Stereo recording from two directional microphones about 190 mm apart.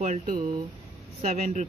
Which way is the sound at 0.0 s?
40° right (ahead or behind).